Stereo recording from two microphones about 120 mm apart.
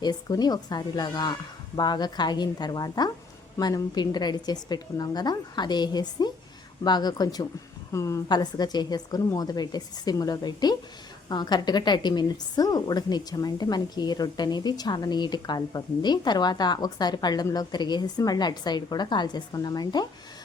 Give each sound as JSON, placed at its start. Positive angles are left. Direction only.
{"t": 0.0, "sound": "a woman's voice", "side_deg": 35}